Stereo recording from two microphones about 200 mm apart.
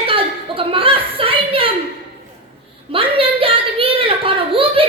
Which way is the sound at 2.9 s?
25° right (ahead or behind).